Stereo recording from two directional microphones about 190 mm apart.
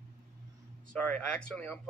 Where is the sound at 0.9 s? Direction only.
5° left (ahead or behind).